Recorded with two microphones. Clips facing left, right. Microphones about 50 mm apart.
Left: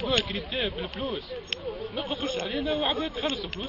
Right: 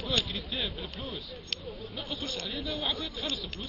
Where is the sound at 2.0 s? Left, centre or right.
Left.